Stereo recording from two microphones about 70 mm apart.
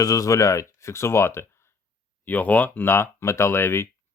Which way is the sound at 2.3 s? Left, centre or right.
Left.